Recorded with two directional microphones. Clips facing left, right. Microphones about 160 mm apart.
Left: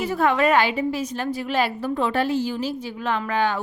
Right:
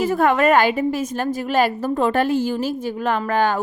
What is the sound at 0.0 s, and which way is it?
A woman's voice, 50° right (ahead or behind).